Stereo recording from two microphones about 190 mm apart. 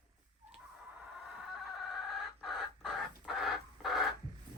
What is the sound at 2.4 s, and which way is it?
Bird, centre (ahead or behind).